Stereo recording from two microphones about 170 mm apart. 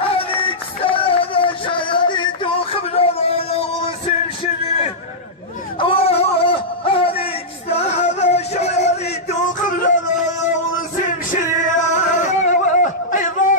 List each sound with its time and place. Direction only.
0.0 s music: 30° left (ahead or behind)
5.8 s a sound: 35° left (ahead or behind)
7.7 s music: 40° left (ahead or behind)
9.3 s a sound: 45° left (ahead or behind)
10.2 s music: 45° left (ahead or behind)
11.1 s male singing: 50° left (ahead or behind)